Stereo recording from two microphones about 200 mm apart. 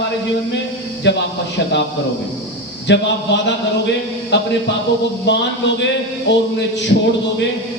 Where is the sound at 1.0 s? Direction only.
60° left (ahead or behind).